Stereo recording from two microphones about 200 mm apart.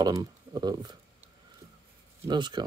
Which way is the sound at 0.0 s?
20° right (ahead or behind).